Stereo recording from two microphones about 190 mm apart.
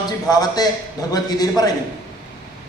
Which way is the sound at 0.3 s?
20° left (ahead or behind).